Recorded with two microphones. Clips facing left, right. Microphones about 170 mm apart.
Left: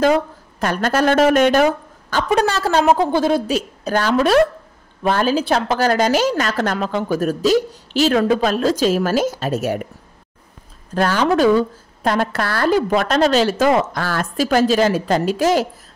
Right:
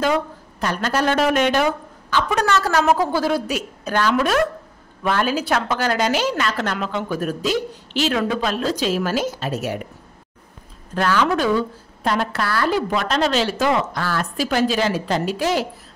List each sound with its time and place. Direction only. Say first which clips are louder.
0.0 s a woman's voice: left 5 dB; 45° left (ahead or behind)
2.3 s a woman's voice: left 3 dB; 30° left (ahead or behind); by 9.8 s 45° left (ahead or behind)
11.0 s a woman's voice: left 3 dB; 40° left (ahead or behind)